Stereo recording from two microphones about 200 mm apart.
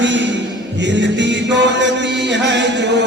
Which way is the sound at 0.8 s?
60° right (ahead or behind).